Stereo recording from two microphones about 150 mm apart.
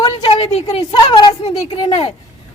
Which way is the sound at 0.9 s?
30° left (ahead or behind).